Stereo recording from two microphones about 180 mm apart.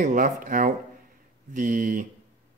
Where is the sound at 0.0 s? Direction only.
45° right (ahead or behind).